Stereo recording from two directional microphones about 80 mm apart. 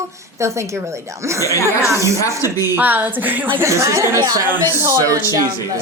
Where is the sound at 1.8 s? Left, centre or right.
Right.